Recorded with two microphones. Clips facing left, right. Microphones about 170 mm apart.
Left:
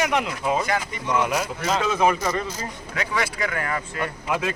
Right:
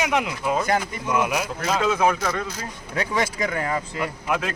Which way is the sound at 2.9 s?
35° right (ahead or behind).